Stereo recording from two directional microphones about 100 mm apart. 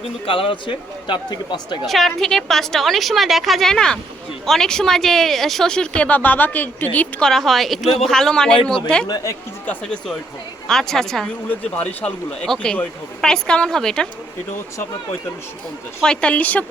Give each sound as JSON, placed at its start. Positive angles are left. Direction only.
{"t": 0.3, "sound": "a man's voice", "side_deg": 60}
{"t": 1.9, "sound": "a woman's voice", "side_deg": 0}
{"t": 7.2, "sound": "a woman's voice", "side_deg": 5}
{"t": 9.0, "sound": "speech", "side_deg": 40}
{"t": 9.6, "sound": "a woman's voice", "side_deg": 10}
{"t": 11.4, "sound": "a woman's voice", "side_deg": 15}
{"t": 16.0, "sound": "speech", "side_deg": 10}